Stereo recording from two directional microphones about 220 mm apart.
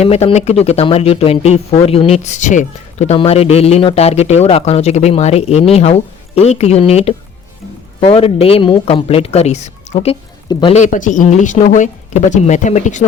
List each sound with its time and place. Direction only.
0.0 s a woman's voice: 30° left (ahead or behind)